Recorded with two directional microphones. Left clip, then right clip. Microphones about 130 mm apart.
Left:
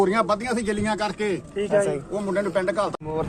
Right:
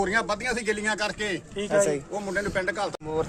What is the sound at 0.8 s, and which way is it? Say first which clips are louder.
Speech: left 2 dB; 55° right (ahead or behind).